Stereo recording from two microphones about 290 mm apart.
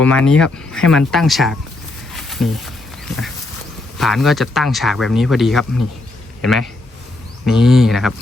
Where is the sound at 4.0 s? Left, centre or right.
Centre.